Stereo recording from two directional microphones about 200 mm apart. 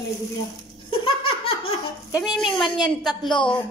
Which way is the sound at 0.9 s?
25° left (ahead or behind).